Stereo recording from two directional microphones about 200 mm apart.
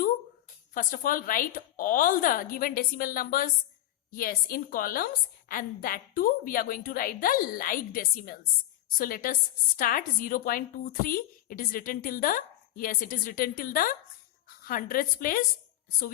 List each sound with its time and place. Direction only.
0.7 s a woman's voice: 40° left (ahead or behind)